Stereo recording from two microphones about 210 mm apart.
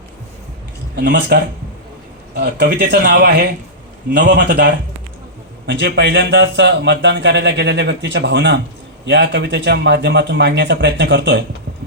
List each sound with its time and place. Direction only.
0.9 s speech: 50° right (ahead or behind)